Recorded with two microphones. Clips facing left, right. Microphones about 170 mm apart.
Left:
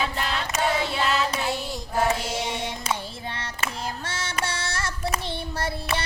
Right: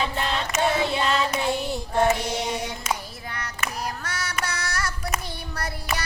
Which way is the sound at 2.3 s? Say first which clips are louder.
Right 1 dB; 25° left (ahead or behind).